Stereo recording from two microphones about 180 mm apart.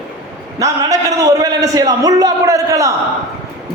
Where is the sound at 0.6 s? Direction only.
20° right (ahead or behind).